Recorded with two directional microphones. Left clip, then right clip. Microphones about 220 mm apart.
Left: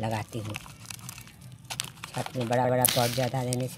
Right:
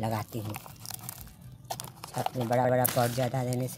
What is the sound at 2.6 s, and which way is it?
Speech, 5° left (ahead or behind).